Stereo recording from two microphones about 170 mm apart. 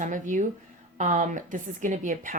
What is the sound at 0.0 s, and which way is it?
Speech, 45° right (ahead or behind).